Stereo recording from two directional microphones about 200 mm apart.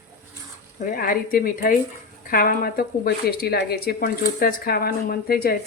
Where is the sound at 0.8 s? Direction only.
45° left (ahead or behind).